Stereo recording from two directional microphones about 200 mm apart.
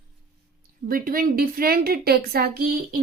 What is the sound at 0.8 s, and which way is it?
A woman's voice, 45° right (ahead or behind).